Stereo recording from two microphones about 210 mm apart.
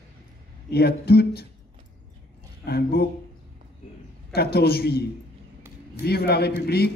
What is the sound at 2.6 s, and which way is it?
Speech, 50° left (ahead or behind).